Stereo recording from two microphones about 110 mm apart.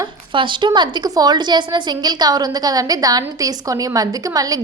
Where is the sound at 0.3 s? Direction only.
45° right (ahead or behind).